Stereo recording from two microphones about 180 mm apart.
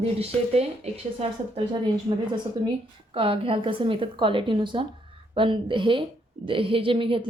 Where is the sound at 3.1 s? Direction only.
30° right (ahead or behind).